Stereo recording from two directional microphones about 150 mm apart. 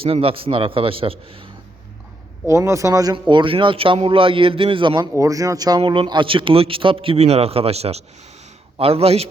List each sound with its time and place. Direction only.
0.0 s a man's voice: 40° right (ahead or behind)
2.5 s a man's voice: 20° right (ahead or behind)
5.1 s a man's voice: 20° right (ahead or behind); by 9.2 s 40° right (ahead or behind)